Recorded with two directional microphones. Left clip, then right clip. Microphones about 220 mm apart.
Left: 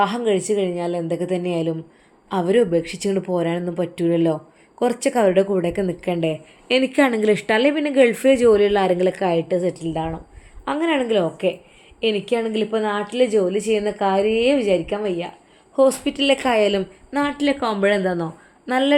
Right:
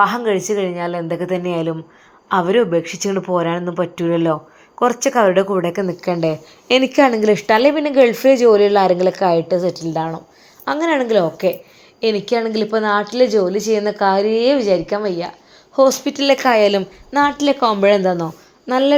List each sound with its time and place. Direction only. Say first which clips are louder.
0.0 s a woman's voice: right 4 dB; 5° left (ahead or behind)
6.2 s a woman's voice: right 4 dB; 10° right (ahead or behind)
17.4 s a woman's voice: right 5 dB; 15° right (ahead or behind)